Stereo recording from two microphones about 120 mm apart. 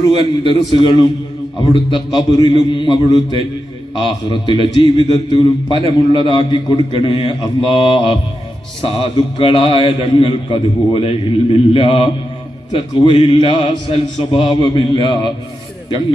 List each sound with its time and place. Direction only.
0.0 s a man's voice: 40° left (ahead or behind)